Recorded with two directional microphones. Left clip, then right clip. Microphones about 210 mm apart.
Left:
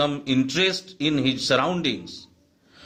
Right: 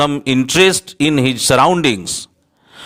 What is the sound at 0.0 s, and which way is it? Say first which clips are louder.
A man's voice: right 8 dB; 45° right (ahead or behind).